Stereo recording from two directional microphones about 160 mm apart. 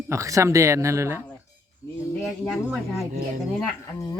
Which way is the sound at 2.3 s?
Centre (ahead or behind).